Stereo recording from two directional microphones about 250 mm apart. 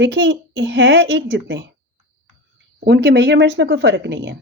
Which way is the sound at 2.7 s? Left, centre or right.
Right.